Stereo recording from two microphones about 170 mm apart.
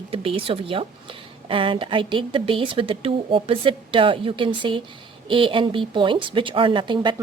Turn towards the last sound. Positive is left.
turn(degrees=-30)  # may be behind; listen again after turning